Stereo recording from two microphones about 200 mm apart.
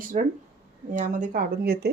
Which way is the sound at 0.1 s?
35° right (ahead or behind).